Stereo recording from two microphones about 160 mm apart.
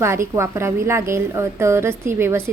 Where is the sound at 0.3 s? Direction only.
15° right (ahead or behind).